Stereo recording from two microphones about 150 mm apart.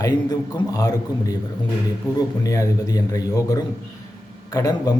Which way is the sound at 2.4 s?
25° left (ahead or behind).